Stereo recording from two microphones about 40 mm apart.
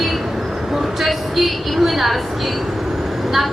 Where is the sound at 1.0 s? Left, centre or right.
Centre.